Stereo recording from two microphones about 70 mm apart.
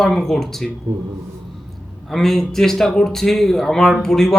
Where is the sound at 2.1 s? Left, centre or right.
Centre.